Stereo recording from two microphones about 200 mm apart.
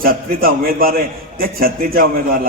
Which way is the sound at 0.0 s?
45° right (ahead or behind).